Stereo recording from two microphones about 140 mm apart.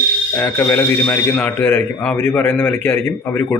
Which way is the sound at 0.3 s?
15° left (ahead or behind).